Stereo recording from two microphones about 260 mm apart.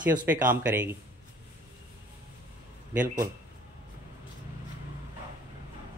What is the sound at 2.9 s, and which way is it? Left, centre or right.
Speech, centre.